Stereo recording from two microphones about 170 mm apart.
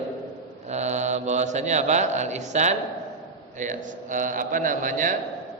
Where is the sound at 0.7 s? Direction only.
45° right (ahead or behind).